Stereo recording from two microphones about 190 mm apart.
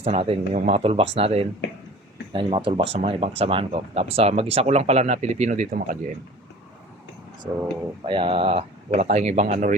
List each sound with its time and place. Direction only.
0.0 s speech: 30° right (ahead or behind)
8.0 s speech: 30° right (ahead or behind)